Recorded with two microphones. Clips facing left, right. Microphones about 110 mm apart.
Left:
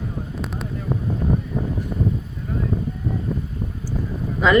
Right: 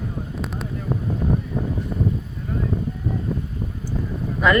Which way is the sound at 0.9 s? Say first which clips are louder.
Even; centre (ahead or behind).